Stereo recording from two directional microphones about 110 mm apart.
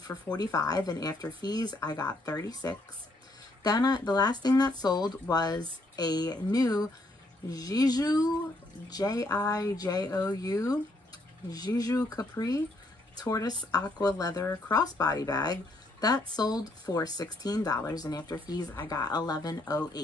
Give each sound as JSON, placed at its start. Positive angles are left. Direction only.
{"t": 0.4, "sound": "speech", "side_deg": 35}